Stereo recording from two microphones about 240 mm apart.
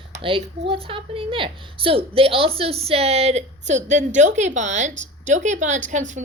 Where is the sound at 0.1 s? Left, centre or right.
Right.